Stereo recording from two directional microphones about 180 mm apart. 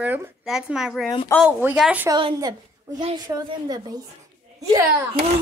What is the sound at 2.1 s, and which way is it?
A child's voice, 25° right (ahead or behind).